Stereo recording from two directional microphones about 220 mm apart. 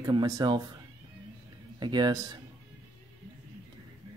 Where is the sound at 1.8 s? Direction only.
20° right (ahead or behind).